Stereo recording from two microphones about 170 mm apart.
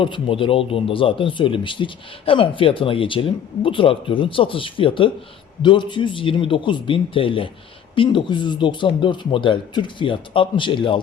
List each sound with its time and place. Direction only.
0.0 s speech: 30° left (ahead or behind)